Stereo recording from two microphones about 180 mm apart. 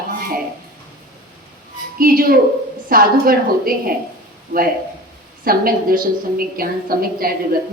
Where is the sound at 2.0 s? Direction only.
55° right (ahead or behind).